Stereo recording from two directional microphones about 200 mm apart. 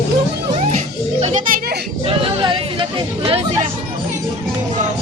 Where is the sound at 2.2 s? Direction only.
25° right (ahead or behind).